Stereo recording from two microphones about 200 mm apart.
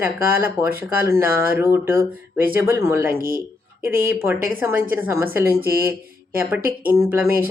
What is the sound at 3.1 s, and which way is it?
Speech, 45° right (ahead or behind).